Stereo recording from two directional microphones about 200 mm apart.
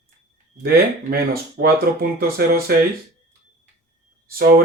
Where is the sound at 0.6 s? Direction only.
50° right (ahead or behind).